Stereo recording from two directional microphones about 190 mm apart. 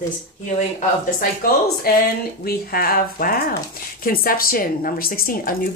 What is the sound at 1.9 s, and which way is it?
A woman's voice, 55° left (ahead or behind).